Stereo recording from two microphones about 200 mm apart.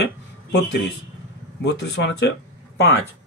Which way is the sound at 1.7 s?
55° left (ahead or behind).